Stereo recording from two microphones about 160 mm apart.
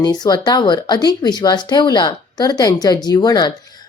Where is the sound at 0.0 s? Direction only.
25° left (ahead or behind).